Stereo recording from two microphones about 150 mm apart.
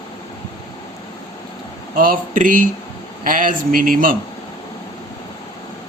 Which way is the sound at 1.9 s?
70° right (ahead or behind).